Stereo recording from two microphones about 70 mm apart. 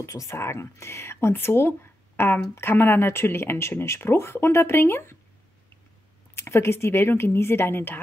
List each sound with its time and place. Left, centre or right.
0.0 s speech: left
6.3 s speech: left